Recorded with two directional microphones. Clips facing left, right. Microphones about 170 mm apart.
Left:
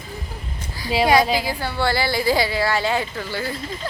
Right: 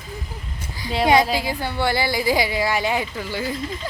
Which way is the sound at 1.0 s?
20° right (ahead or behind).